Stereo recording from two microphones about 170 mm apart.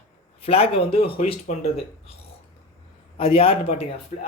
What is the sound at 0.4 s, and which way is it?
Speech, 35° left (ahead or behind).